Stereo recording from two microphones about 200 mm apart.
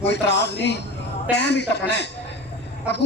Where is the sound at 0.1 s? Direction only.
55° left (ahead or behind).